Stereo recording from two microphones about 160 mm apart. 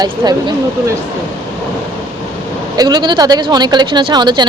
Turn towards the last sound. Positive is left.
turn(degrees=-30)  # may be behind; listen again after turning